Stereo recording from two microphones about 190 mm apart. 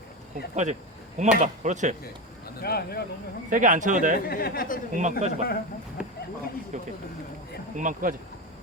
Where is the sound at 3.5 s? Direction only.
40° right (ahead or behind).